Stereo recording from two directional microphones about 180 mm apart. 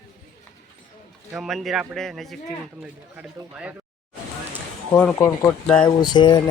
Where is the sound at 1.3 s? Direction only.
Centre (ahead or behind).